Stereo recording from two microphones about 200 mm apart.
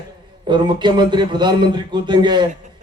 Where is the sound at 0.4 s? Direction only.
20° right (ahead or behind).